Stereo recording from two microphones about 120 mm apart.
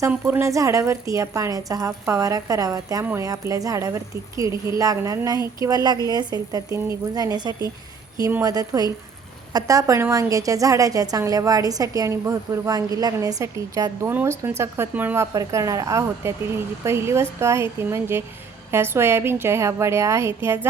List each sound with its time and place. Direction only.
0.1 s a woman's voice: 20° right (ahead or behind)
14.1 s a woman's voice: 15° right (ahead or behind)